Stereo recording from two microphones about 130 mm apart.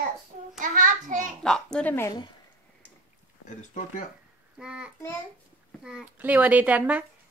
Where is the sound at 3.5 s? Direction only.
75° left (ahead or behind).